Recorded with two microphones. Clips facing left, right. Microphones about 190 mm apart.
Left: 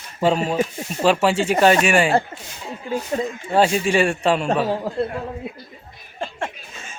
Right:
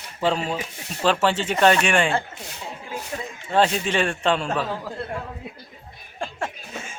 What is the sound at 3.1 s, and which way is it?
Speech, 40° left (ahead or behind).